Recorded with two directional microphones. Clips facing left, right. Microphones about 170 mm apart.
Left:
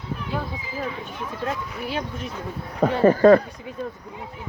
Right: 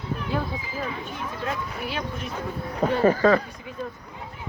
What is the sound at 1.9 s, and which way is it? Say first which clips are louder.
Speech: left 5 dB; 40° left (ahead or behind).